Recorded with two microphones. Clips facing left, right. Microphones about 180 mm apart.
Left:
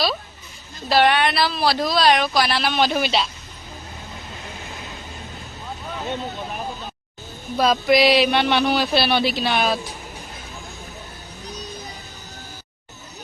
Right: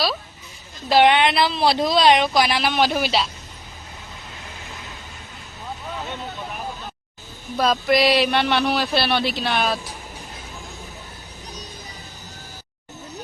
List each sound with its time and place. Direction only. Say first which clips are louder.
0.9 s speech: right 2 dB; 20° right (ahead or behind)
7.5 s speech: left 2 dB; 5° left (ahead or behind)